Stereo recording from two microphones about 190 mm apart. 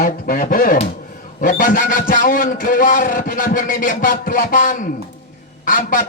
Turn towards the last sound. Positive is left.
turn(degrees=45)  # may be behind; listen again after turning